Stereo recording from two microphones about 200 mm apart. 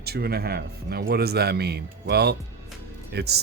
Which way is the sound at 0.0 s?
50° right (ahead or behind).